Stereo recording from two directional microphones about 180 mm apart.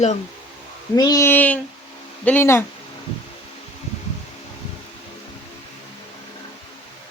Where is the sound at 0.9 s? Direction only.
20° left (ahead or behind).